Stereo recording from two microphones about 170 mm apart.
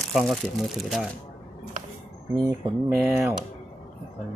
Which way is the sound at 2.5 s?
20° right (ahead or behind).